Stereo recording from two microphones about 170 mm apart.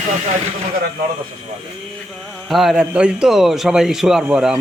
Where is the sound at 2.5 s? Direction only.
Centre (ahead or behind).